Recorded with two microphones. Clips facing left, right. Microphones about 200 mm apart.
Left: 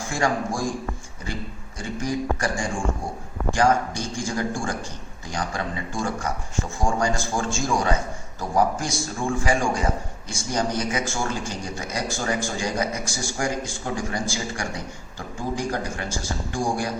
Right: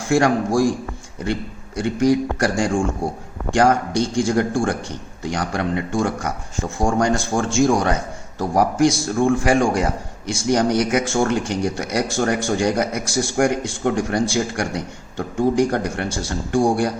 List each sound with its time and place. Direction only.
0.0 s a man's voice: 70° right (ahead or behind)